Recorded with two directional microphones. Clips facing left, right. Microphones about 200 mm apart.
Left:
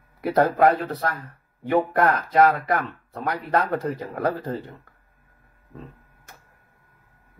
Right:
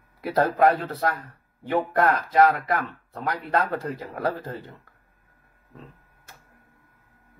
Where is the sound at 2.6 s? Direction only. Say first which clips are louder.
Left 2 dB; 15° left (ahead or behind).